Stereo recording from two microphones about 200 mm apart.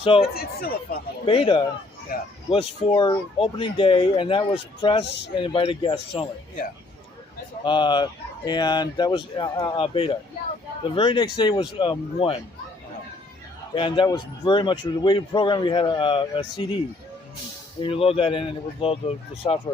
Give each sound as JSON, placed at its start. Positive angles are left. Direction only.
{"t": 0.0, "sound": "a man's voice", "side_deg": 25}
{"t": 0.3, "sound": "speech", "side_deg": 50}
{"t": 1.3, "sound": "a man's voice", "side_deg": 25}
{"t": 2.1, "sound": "speech", "side_deg": 50}
{"t": 2.5, "sound": "a man's voice", "side_deg": 25}
{"t": 7.6, "sound": "a man's voice", "side_deg": 25}
{"t": 13.7, "sound": "a man's voice", "side_deg": 25}
{"t": 17.8, "sound": "a man's voice", "side_deg": 30}